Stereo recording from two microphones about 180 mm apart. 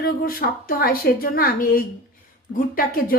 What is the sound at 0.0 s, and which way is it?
Speech, 55° left (ahead or behind).